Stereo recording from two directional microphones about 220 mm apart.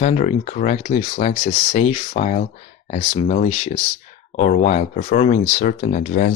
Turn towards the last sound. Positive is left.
turn(degrees=40)  # may be behind; listen again after turning